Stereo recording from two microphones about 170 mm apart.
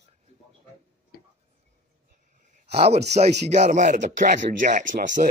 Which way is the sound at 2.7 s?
40° right (ahead or behind).